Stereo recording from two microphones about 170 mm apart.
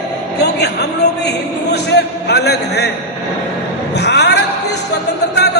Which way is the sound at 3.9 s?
80° left.